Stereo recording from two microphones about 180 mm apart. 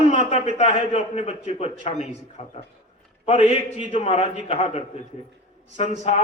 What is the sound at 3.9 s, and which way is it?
Speech, 40° left (ahead or behind).